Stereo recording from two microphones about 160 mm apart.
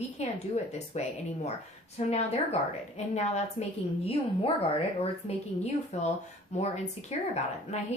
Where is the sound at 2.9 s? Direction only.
45° left (ahead or behind).